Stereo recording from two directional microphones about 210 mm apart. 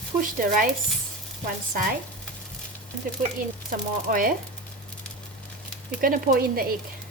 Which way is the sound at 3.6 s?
40° right (ahead or behind).